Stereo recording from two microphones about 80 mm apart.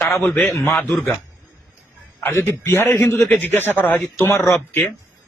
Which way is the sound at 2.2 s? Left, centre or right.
Left.